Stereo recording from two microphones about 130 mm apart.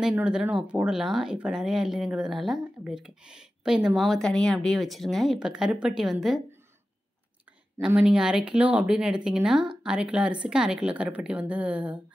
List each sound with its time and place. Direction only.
0.2 s speech: 5° right (ahead or behind)
7.8 s speech: 5° right (ahead or behind)